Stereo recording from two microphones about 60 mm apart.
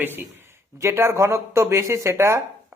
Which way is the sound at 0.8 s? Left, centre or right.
Right.